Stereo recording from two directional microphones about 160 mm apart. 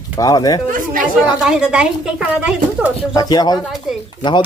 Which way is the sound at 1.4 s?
5° right (ahead or behind).